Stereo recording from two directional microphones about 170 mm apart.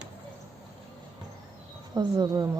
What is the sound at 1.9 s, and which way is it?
Speech, 25° right (ahead or behind).